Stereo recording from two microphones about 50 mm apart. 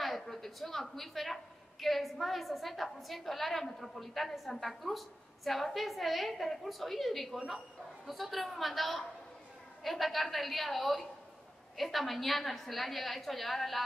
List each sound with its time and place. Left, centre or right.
0.0 s a woman's voice: centre